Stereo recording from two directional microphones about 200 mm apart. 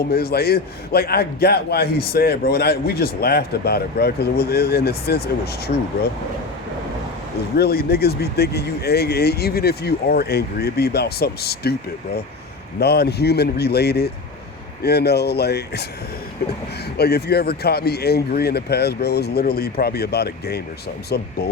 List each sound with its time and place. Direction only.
0.1 s a man's voice: 50° left (ahead or behind)
7.5 s a man's voice: 50° left (ahead or behind)
12.8 s a man's voice: 50° left (ahead or behind)